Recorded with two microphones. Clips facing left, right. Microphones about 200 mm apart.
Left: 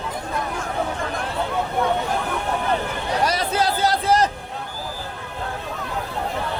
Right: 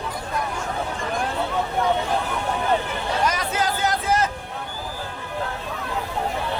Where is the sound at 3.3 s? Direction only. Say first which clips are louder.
Left 2 dB; 35° left (ahead or behind).